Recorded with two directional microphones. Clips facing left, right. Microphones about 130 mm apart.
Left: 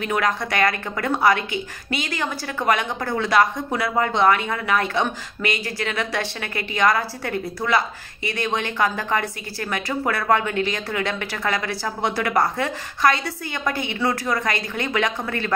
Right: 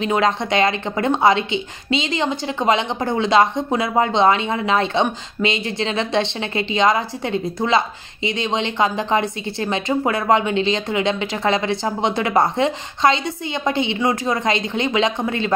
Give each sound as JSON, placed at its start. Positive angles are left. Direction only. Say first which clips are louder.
{"t": 0.0, "sound": "a woman's voice", "louder": "right 4 dB", "side_deg": -25}